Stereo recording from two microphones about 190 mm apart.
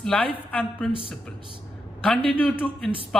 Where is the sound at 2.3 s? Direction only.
10° left (ahead or behind).